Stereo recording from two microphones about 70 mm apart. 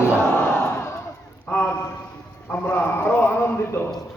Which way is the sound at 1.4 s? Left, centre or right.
Left.